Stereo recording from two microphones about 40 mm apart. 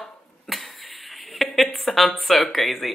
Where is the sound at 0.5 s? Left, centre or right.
Centre.